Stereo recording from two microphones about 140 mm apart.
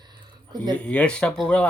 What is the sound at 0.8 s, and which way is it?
Speech, 10° left (ahead or behind).